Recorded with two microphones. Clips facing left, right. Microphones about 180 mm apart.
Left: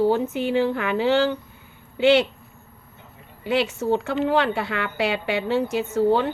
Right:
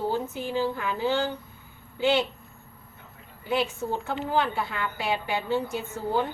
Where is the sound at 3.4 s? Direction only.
80° left.